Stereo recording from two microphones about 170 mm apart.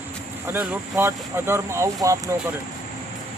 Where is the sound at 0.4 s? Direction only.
10° right (ahead or behind).